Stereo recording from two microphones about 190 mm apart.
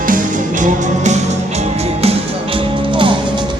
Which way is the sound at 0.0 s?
45° right (ahead or behind).